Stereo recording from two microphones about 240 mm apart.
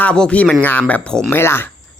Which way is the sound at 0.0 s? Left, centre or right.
Centre.